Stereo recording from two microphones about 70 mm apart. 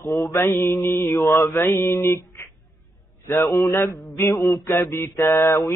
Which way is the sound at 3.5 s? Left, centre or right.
Left.